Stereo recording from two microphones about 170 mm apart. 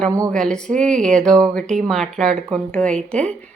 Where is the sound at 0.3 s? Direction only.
5° left (ahead or behind).